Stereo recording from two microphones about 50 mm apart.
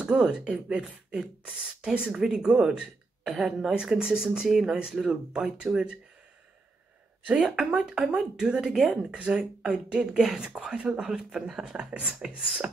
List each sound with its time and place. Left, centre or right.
0.0 s speech: centre
7.2 s speech: right
9.2 s speech: centre
11.7 s speech: right